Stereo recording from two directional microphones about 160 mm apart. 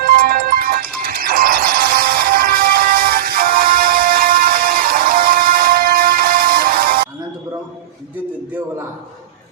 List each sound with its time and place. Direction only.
0.0 s music: 65° right (ahead or behind)